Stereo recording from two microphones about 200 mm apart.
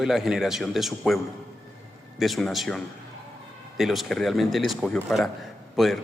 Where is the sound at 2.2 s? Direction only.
Centre (ahead or behind).